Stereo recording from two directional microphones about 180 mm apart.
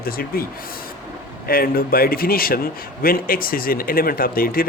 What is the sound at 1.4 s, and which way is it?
Speech, 55° left (ahead or behind).